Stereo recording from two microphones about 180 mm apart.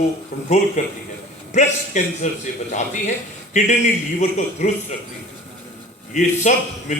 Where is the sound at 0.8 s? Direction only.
40° left (ahead or behind).